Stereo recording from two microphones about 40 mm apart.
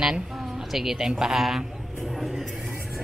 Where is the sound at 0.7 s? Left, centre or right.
Centre.